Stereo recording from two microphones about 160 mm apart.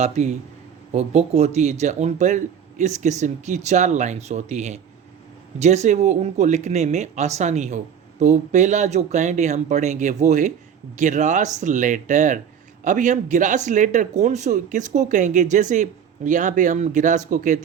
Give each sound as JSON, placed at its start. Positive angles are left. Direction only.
{"t": 0.0, "sound": "speech", "side_deg": -45}